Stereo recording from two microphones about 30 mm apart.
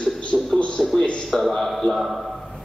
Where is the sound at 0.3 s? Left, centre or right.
Centre.